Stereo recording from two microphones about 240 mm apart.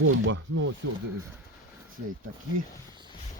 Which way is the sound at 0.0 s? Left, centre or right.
Right.